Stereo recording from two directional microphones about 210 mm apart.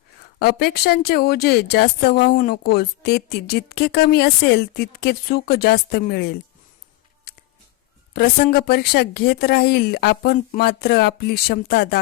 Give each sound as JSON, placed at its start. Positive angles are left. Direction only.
{"t": 0.3, "sound": "a woman's voice", "side_deg": 50}
{"t": 8.1, "sound": "a woman's voice", "side_deg": 45}